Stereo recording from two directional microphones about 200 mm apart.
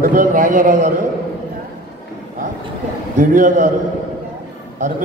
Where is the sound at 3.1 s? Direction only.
40° right (ahead or behind).